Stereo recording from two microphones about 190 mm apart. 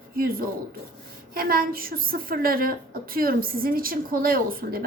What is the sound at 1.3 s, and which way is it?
A woman's voice, 50° right (ahead or behind).